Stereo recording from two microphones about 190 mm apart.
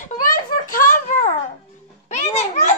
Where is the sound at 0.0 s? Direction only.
45° left (ahead or behind).